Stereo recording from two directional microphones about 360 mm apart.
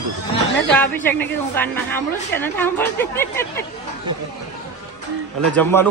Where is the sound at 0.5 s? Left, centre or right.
Centre.